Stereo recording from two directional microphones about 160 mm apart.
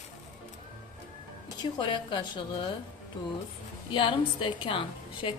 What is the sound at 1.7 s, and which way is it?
Speech, 30° left (ahead or behind).